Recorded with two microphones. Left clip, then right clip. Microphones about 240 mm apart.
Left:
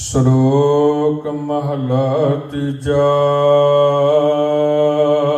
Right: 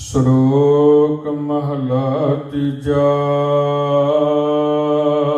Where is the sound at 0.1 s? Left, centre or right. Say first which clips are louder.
Even; left.